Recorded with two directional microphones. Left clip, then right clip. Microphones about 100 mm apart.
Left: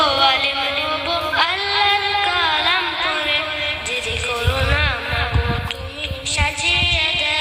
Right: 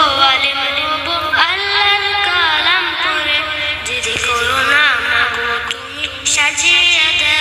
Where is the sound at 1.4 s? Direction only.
35° left (ahead or behind).